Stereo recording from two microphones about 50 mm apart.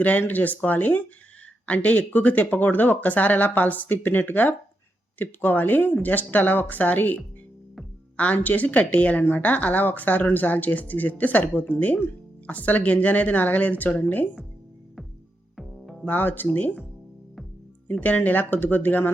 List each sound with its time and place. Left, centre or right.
0.0 s speech: left
15.5 s music: centre
16.0 s speech: left
18.0 s speech: left